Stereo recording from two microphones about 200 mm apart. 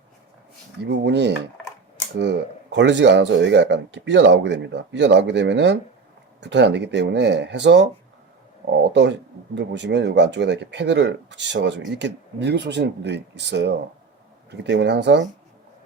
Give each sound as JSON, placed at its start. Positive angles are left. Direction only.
{"t": 0.9, "sound": "speech", "side_deg": -60}